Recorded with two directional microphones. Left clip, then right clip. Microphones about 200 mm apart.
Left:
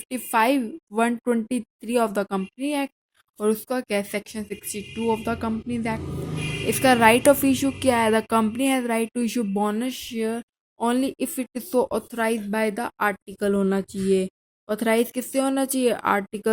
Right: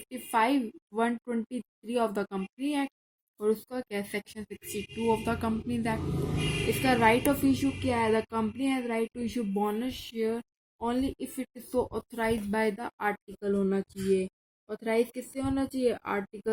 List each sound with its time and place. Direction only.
0.1 s a woman's voice: 35° left (ahead or behind)
6.8 s a woman's voice: 40° left (ahead or behind)